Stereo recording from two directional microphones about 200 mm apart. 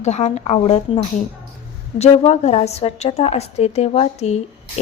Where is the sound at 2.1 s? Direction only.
30° left (ahead or behind).